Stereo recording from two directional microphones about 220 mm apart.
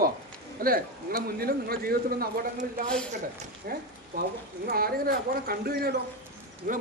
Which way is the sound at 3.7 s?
40° right (ahead or behind).